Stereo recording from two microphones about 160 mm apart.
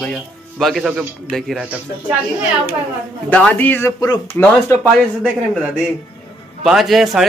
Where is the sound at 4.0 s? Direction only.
25° left (ahead or behind).